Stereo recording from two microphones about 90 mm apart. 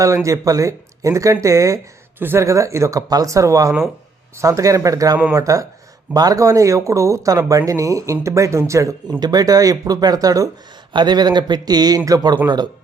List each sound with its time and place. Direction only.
0.0 s speech: 35° right (ahead or behind)
2.1 s speech: 20° right (ahead or behind)
2.4 s speech: 35° right (ahead or behind)
10.9 s speech: 50° right (ahead or behind)